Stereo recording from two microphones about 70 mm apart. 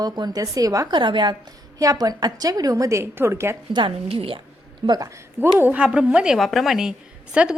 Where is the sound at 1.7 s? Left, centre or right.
Right.